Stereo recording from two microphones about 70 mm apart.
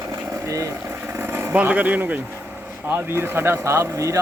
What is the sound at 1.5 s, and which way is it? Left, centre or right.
Speech, right.